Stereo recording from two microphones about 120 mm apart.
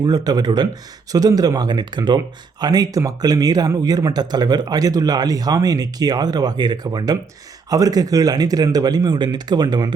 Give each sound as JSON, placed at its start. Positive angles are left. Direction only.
{"t": 0.0, "sound": "speech", "side_deg": -35}